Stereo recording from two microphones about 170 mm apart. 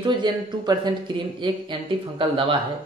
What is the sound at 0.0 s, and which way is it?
Speech, 25° right (ahead or behind).